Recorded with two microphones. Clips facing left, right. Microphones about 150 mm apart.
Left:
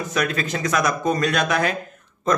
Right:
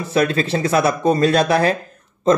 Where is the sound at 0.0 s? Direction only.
30° right (ahead or behind).